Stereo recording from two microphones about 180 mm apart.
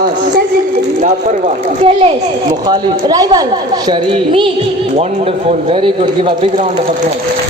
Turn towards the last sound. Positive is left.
turn(degrees=-30)  # may be behind; listen again after turning